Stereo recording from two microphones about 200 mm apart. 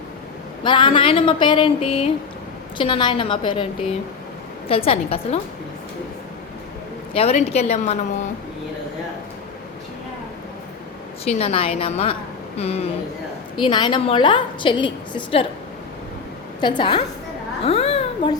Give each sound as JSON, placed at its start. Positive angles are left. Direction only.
{"t": 0.6, "sound": "a woman's voice", "side_deg": 25}
{"t": 4.7, "sound": "a woman's voice", "side_deg": 30}
{"t": 7.1, "sound": "a woman's voice", "side_deg": 30}
{"t": 11.3, "sound": "a woman's voice", "side_deg": 30}
{"t": 16.6, "sound": "a woman's voice", "side_deg": 25}